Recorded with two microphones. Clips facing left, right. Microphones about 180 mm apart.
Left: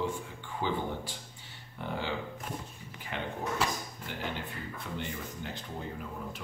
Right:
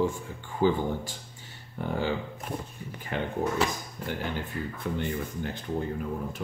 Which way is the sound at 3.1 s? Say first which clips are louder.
Right 6 dB; 50° right (ahead or behind).